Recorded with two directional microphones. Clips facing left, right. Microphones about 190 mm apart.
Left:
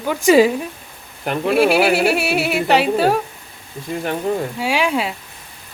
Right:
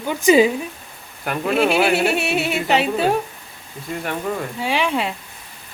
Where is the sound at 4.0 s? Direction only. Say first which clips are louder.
Left 4 dB; 30° left (ahead or behind).